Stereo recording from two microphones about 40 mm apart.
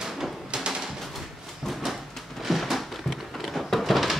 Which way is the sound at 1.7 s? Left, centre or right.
Centre.